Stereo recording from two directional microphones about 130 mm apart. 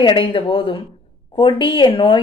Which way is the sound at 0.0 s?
40° left (ahead or behind).